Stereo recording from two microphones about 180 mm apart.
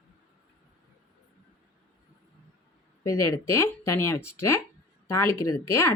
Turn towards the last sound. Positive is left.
turn(degrees=15)  # may be behind; listen again after turning